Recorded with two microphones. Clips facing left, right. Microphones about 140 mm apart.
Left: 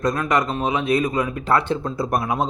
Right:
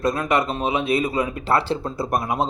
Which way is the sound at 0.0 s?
25° right (ahead or behind).